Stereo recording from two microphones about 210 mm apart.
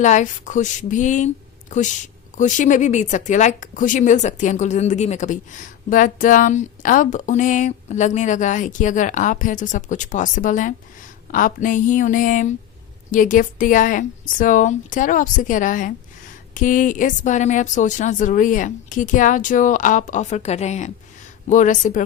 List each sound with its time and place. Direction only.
0.0 s speech: 35° left (ahead or behind)
2.4 s speech: 35° left (ahead or behind)